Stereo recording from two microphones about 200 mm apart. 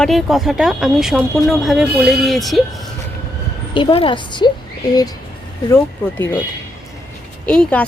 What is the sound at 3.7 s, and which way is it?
Speech, 25° left (ahead or behind).